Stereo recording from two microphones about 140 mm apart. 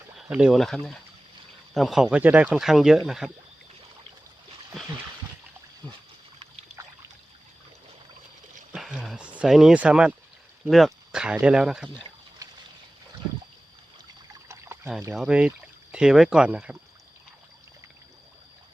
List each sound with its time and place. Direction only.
0.2 s speech: 5° right (ahead or behind)
8.7 s speech: 5° right (ahead or behind)
12.4 s boat: 25° right (ahead or behind)
14.4 s trickle: 20° right (ahead or behind)
15.1 s speech: 5° right (ahead or behind)